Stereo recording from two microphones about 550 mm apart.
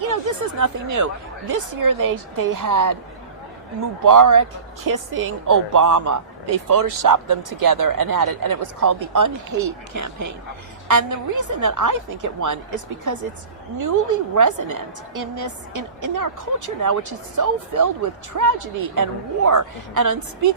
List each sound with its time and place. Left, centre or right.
0.1 s speech: right
4.0 s speech: right